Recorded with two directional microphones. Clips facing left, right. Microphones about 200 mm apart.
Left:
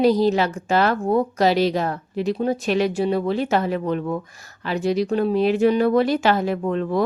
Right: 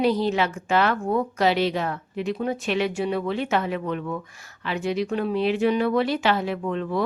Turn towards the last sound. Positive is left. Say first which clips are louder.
# left 4 dB
turn(degrees=40)  # may be behind; listen again after turning